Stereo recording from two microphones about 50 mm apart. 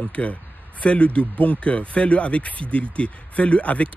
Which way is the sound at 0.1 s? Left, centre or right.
Left.